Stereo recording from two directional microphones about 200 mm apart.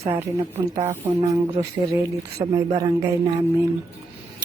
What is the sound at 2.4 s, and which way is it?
Speech, 20° right (ahead or behind).